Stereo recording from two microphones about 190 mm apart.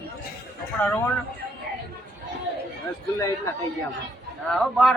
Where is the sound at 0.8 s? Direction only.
10° left (ahead or behind).